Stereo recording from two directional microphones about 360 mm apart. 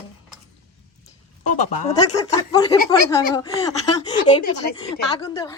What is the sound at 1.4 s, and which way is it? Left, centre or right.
A woman's voice, left.